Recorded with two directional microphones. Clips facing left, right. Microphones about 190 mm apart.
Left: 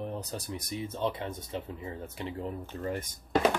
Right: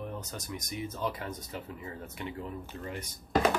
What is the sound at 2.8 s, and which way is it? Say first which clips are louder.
Speech: left 8 dB; 45° left (ahead or behind).